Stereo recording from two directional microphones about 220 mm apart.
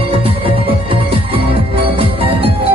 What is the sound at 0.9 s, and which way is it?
Music, 25° right (ahead or behind).